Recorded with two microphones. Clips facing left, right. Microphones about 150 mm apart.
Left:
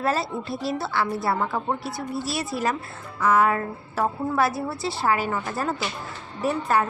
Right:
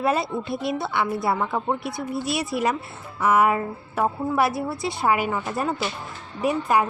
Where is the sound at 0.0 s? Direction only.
15° right (ahead or behind).